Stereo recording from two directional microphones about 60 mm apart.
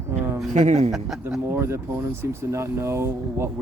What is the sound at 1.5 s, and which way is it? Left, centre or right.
Speech, right.